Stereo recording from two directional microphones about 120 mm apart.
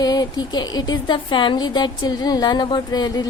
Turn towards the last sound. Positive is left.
turn(degrees=35)  # may be behind; listen again after turning